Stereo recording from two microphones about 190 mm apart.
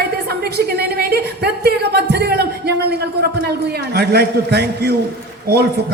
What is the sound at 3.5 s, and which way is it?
A woman's voice, 55° right (ahead or behind).